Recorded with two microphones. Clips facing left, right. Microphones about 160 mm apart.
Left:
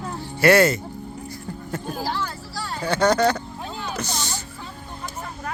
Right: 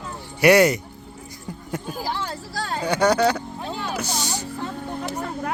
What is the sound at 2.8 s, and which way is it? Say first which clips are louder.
Speech: even; 15° right (ahead or behind).